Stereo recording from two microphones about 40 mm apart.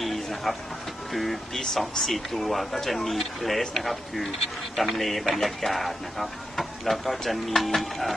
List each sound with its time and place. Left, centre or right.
0.0 s a sound: centre
1.1 s speech: centre
1.5 s speech: centre